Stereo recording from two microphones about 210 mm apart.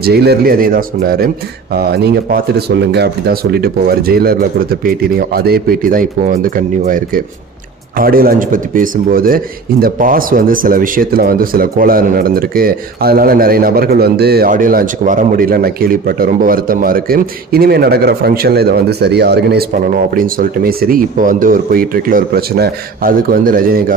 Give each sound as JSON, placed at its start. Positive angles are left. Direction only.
{"t": 0.0, "sound": "speech", "side_deg": -50}